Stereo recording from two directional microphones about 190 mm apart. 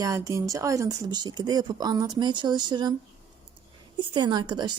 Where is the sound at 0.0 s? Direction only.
15° right (ahead or behind).